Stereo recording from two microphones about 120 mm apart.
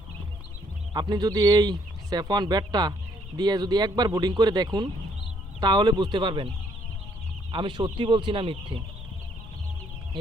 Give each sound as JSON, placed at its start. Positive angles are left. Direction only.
{"t": 0.9, "sound": "speech", "side_deg": -35}
{"t": 7.5, "sound": "speech", "side_deg": -40}